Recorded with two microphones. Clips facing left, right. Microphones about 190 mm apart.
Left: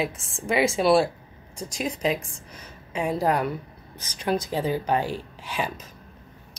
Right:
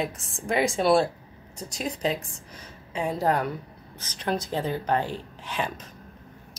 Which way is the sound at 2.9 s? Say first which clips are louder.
Left 1 dB; 10° left (ahead or behind).